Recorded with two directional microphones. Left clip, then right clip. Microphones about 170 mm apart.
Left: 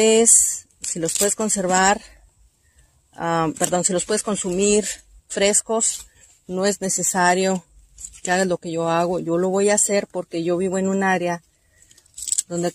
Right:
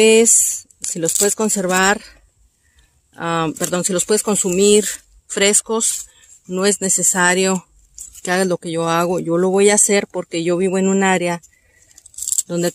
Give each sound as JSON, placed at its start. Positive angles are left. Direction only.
{"t": 0.0, "sound": "speech", "side_deg": -25}
{"t": 3.3, "sound": "speech", "side_deg": -35}
{"t": 12.4, "sound": "speech", "side_deg": -35}